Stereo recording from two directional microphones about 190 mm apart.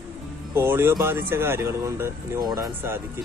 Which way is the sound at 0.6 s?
10° right (ahead or behind).